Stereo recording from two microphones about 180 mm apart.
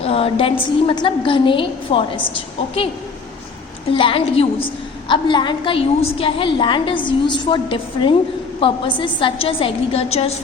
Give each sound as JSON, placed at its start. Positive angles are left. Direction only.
{"t": 0.0, "sound": "a woman's voice", "side_deg": 30}
{"t": 3.9, "sound": "a woman's voice", "side_deg": 30}